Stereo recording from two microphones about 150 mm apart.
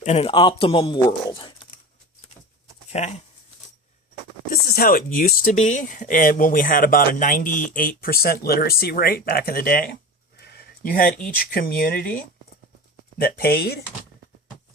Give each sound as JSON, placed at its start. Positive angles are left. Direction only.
{"t": 0.0, "sound": "a man's voice", "side_deg": 40}
{"t": 1.3, "sound": "typing", "side_deg": 35}
{"t": 3.0, "sound": "speech", "side_deg": 45}
{"t": 4.4, "sound": "speech", "side_deg": 75}
{"t": 13.1, "sound": "speech", "side_deg": 90}